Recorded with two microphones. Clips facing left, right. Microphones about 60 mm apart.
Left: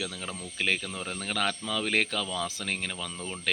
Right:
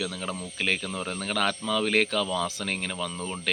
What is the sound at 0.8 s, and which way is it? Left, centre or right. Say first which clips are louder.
Speech: right 4 dB; centre.